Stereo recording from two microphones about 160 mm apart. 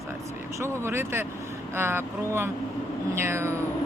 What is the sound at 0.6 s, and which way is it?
A man's voice, 15° right (ahead or behind).